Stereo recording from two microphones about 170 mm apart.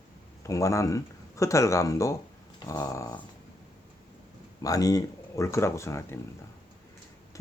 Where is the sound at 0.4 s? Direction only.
20° left (ahead or behind).